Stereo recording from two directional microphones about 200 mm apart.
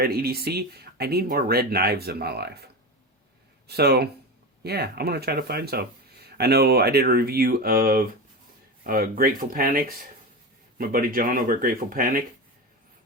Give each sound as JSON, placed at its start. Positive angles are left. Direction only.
{"t": 0.0, "sound": "speech", "side_deg": -50}
{"t": 3.7, "sound": "speech", "side_deg": -55}